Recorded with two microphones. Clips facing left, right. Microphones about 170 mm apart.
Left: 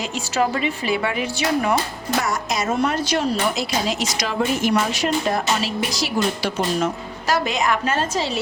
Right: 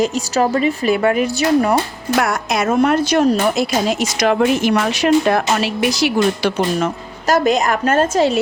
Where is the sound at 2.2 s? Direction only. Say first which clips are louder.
Right 6 dB; 60° right (ahead or behind).